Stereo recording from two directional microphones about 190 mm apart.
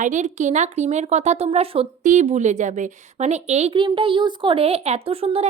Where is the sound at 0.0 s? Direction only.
40° right (ahead or behind).